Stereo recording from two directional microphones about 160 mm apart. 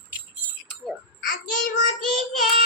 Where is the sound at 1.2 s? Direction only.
55° left (ahead or behind).